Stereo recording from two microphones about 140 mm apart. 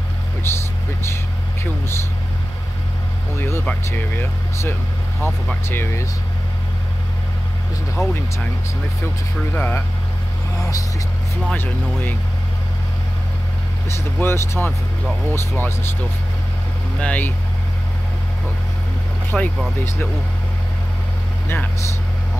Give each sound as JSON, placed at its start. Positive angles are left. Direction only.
{"t": 0.4, "sound": "vehicle", "side_deg": 15}
{"t": 1.6, "sound": "speech", "side_deg": 20}
{"t": 3.3, "sound": "speech", "side_deg": 15}
{"t": 8.0, "sound": "speech", "side_deg": 20}
{"t": 9.5, "sound": "speech", "side_deg": 15}
{"t": 10.6, "sound": "speech", "side_deg": 25}
{"t": 11.4, "sound": "speech", "side_deg": 15}
{"t": 13.8, "sound": "speech", "side_deg": 20}
{"t": 17.0, "sound": "speech", "side_deg": 10}
{"t": 19.3, "sound": "speech", "side_deg": 5}